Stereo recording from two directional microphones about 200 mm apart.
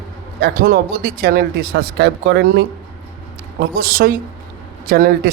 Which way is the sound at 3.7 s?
45° right (ahead or behind).